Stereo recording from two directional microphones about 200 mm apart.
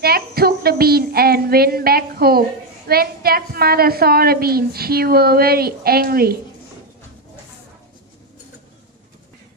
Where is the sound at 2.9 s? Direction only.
50° right (ahead or behind).